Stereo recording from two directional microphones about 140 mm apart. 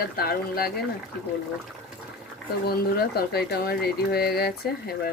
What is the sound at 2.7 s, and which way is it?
Speech, 90° left.